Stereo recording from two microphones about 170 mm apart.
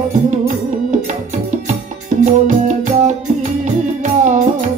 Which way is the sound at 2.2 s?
45° right (ahead or behind).